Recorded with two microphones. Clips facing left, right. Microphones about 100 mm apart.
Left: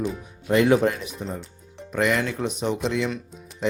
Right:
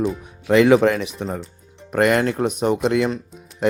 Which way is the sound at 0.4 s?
90° right.